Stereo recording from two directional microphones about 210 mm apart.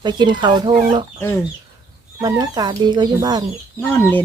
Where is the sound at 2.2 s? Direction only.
20° right (ahead or behind).